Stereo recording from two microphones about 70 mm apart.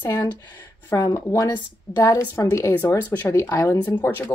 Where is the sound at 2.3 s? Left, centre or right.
Left.